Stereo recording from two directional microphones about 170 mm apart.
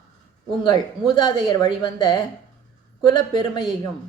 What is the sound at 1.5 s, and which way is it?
A man's voice, 25° left (ahead or behind).